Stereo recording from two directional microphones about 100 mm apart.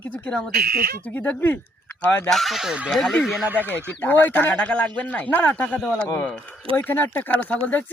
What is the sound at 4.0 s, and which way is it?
Speech, 20° left (ahead or behind).